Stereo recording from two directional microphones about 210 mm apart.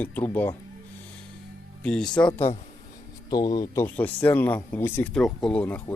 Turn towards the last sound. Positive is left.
turn(degrees=10)  # may be behind; listen again after turning